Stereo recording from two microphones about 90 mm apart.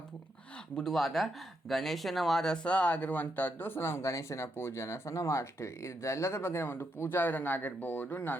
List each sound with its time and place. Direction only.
0.8 s speech: 5° left (ahead or behind); by 8.4 s 20° left (ahead or behind)